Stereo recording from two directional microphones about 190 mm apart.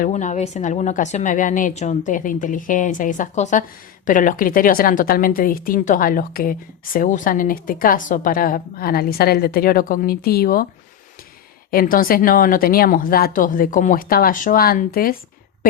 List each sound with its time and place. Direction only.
0.0 s a woman's voice: 40° left (ahead or behind)
11.7 s a woman's voice: 50° left (ahead or behind)